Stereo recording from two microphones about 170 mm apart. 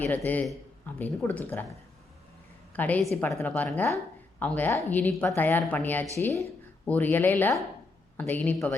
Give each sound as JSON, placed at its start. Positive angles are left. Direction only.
{"t": 0.3, "sound": "speech", "side_deg": 10}
{"t": 2.7, "sound": "speech", "side_deg": 10}